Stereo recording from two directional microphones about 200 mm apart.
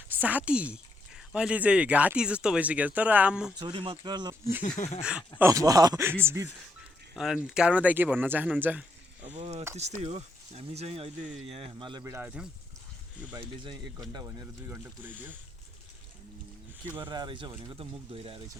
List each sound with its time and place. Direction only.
0.2 s speech: 10° right (ahead or behind)
3.6 s speech: 25° right (ahead or behind)
4.8 s speech: 35° left (ahead or behind)
5.4 s speech: 15° right (ahead or behind)
7.2 s speech: 5° right (ahead or behind)
9.4 s speech: 30° right (ahead or behind); by 12.5 s 5° right (ahead or behind)
13.3 s speech: 20° right (ahead or behind)
16.9 s speech: 20° right (ahead or behind)